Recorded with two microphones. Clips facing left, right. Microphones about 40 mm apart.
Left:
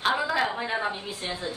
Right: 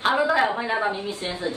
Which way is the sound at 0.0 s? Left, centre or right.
Centre.